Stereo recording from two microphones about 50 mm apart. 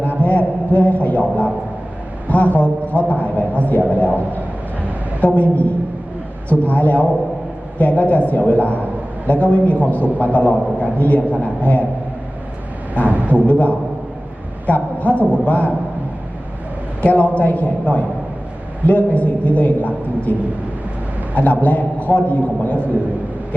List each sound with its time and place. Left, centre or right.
0.2 s a sound: left
5.2 s a man's voice: left
13.1 s a sound: right
13.5 s a man's voice: left
17.0 s a man's voice: left
21.3 s a man's voice: left